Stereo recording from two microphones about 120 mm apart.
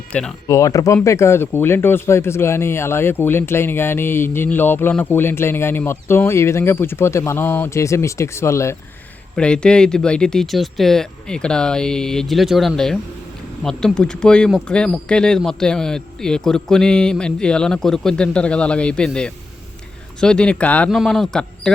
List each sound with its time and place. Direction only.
0.1 s speech: 10° left (ahead or behind)
0.4 s speech: 30° left (ahead or behind)
9.3 s speech: 10° left (ahead or behind)
20.9 s speech: centre (ahead or behind)